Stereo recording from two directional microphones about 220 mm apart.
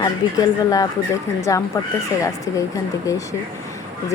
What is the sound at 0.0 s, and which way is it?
Speech, 15° left (ahead or behind).